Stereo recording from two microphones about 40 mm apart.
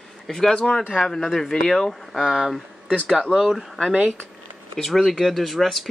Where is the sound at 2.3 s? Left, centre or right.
Centre.